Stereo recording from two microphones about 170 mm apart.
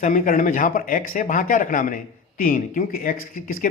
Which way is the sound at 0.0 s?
50° left (ahead or behind).